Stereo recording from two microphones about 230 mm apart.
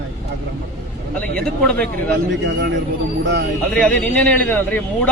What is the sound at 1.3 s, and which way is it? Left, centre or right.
Speech, centre.